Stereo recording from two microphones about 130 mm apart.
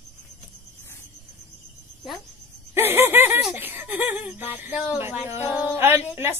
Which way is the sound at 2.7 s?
15° right (ahead or behind).